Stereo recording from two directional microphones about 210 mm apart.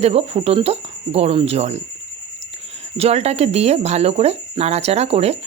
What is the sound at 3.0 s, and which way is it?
Speech, 30° right (ahead or behind).